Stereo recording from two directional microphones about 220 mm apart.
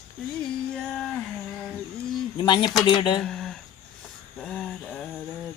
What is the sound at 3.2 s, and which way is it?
Speech, centre (ahead or behind).